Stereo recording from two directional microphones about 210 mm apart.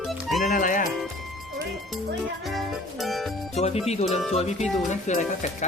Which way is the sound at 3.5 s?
30° left (ahead or behind).